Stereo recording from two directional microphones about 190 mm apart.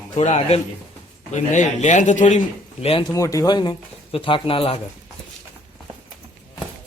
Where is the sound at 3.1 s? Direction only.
15° left (ahead or behind).